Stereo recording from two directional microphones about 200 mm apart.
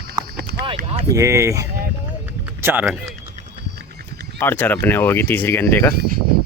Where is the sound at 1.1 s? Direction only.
15° right (ahead or behind).